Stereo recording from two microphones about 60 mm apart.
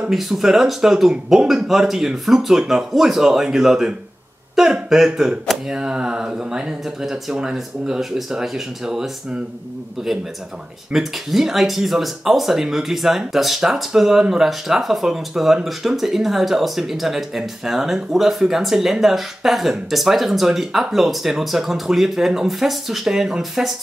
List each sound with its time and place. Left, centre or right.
0.1 s speech: centre
10.9 s speech: centre